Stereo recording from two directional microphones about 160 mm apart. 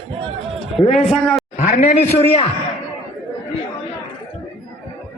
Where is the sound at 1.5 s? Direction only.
40° left (ahead or behind).